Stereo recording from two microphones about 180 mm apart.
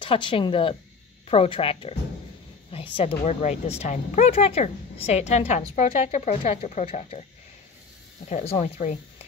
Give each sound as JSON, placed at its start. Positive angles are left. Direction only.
{"t": 0.0, "sound": "speech", "side_deg": 30}
{"t": 8.3, "sound": "speech", "side_deg": 40}